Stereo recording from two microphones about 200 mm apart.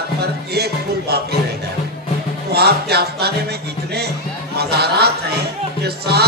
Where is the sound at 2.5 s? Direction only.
55° right (ahead or behind).